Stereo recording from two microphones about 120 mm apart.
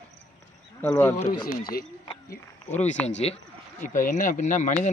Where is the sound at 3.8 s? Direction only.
90° left.